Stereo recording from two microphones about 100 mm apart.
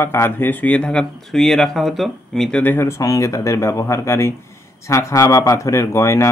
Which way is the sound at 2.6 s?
20° left (ahead or behind).